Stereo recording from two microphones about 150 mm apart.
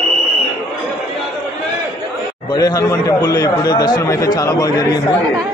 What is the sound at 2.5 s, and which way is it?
A man's voice, 25° left (ahead or behind).